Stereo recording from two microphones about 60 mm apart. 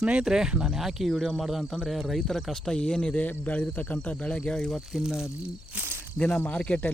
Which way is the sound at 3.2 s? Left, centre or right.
Left.